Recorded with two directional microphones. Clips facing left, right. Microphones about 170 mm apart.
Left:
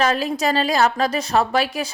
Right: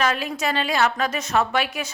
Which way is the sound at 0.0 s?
35° left (ahead or behind).